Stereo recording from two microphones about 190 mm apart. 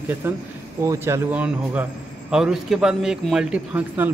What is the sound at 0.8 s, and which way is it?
A man's voice, 15° right (ahead or behind).